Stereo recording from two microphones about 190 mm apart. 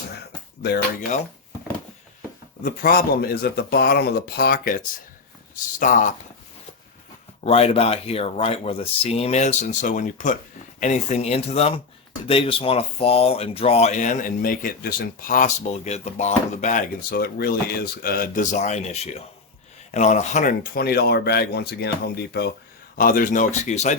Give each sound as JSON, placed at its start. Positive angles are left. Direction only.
{"t": 2.6, "sound": "speech", "side_deg": 50}
{"t": 5.8, "sound": "speech", "side_deg": 45}
{"t": 7.4, "sound": "speech", "side_deg": 30}